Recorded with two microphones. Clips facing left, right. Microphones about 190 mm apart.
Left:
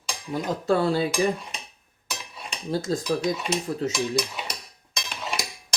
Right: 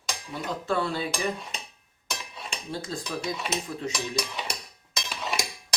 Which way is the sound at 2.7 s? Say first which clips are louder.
Left 9 dB; 40° left (ahead or behind).